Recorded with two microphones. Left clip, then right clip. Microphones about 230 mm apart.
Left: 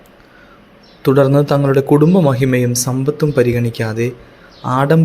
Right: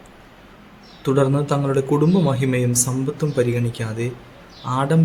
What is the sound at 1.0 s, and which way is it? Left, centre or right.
Speech, left.